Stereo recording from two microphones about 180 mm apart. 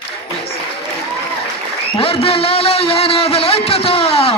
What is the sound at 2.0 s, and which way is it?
A man's voice, 30° left (ahead or behind).